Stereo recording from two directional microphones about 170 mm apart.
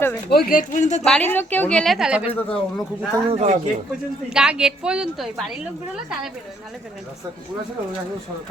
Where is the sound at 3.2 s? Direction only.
40° right (ahead or behind).